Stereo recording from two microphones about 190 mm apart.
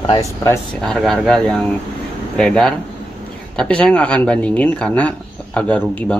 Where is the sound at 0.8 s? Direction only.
Centre (ahead or behind).